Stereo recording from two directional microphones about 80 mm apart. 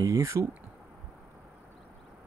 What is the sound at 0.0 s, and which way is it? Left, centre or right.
Speech, right.